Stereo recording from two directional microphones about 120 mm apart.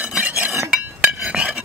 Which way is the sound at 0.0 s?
10° right (ahead or behind).